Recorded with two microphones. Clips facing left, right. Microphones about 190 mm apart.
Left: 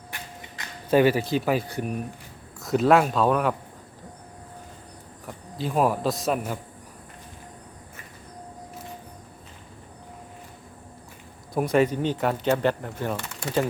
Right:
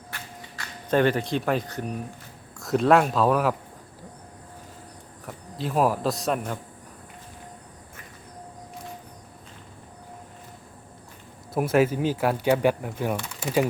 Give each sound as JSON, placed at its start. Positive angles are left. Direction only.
{"t": 0.1, "sound": "a sound", "side_deg": 10}
{"t": 2.6, "sound": "speech", "side_deg": 0}
{"t": 5.2, "sound": "speech", "side_deg": 0}
{"t": 11.5, "sound": "speech", "side_deg": -5}